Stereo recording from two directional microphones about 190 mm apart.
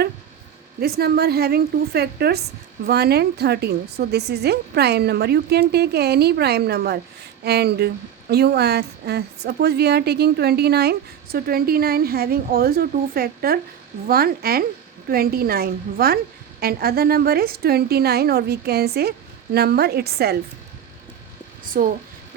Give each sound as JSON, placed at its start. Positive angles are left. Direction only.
{"t": 0.8, "sound": "a woman's voice", "side_deg": -55}
{"t": 21.7, "sound": "a woman's voice", "side_deg": -45}